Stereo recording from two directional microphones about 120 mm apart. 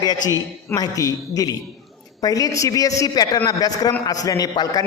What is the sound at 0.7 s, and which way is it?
A man's voice, 30° left (ahead or behind).